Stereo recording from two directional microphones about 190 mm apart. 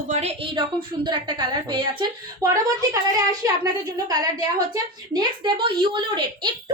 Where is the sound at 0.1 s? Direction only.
35° right (ahead or behind).